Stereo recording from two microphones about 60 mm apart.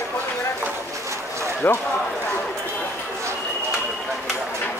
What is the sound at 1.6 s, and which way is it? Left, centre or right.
Speech, left.